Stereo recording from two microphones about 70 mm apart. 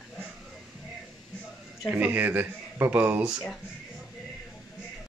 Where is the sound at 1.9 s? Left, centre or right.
Right.